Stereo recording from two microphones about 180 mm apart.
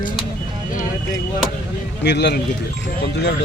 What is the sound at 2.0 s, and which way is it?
Speech, 70° left (ahead or behind).